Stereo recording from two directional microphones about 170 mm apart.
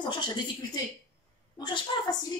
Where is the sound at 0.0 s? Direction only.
25° left (ahead or behind).